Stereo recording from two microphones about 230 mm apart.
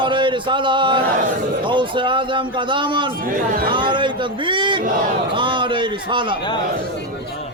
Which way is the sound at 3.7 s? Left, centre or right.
Right.